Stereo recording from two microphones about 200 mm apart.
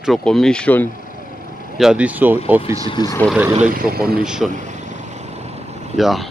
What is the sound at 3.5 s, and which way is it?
Speech, 45° right (ahead or behind).